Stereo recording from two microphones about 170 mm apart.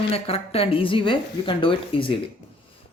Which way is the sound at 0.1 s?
35° left (ahead or behind).